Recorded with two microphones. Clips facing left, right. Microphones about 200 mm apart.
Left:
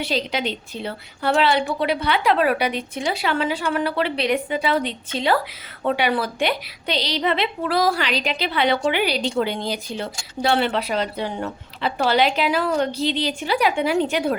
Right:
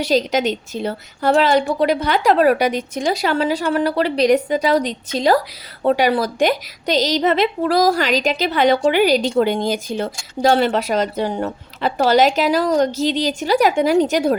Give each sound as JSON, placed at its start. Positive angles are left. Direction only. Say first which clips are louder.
{"t": 0.0, "sound": "a woman's voice", "louder": "right 7 dB", "side_deg": -45}